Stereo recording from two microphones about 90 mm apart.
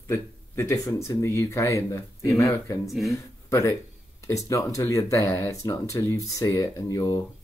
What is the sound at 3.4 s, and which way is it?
Speech, 35° left (ahead or behind).